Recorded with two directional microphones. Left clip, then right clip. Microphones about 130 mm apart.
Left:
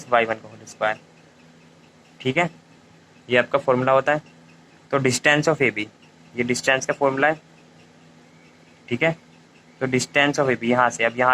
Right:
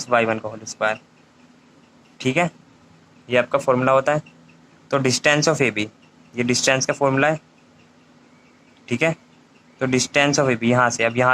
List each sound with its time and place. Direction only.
0.0 s speech: 40° right (ahead or behind)
2.1 s speech: 35° right (ahead or behind)
8.9 s speech: 40° right (ahead or behind)